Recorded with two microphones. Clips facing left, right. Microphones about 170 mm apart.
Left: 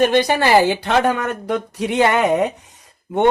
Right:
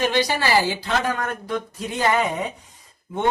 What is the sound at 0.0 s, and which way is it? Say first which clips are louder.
Speech: left 6 dB; 55° left (ahead or behind).